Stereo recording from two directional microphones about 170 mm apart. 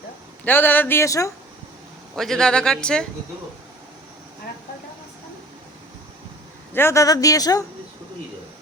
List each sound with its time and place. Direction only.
0.4 s speech: 10° left (ahead or behind)
2.1 s speech: centre (ahead or behind)
6.7 s speech: 15° left (ahead or behind)